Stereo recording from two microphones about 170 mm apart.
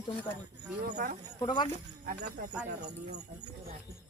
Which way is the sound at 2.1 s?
45° right (ahead or behind).